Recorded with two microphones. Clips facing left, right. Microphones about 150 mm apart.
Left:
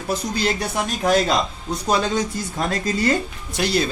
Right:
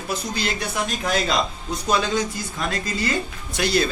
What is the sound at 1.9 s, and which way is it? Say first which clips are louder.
Speech: left 1 dB; 30° left (ahead or behind).